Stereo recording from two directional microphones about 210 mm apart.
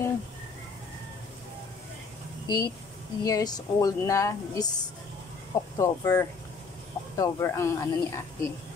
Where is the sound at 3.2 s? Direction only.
15° left (ahead or behind).